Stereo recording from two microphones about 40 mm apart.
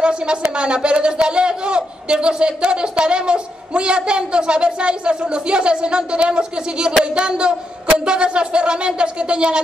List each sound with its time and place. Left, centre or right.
0.0 s speech: right